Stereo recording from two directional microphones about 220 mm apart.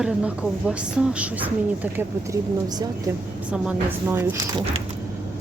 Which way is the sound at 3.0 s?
10° right (ahead or behind).